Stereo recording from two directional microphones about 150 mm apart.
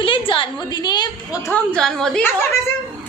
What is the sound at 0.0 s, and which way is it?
A woman's voice, 35° left (ahead or behind).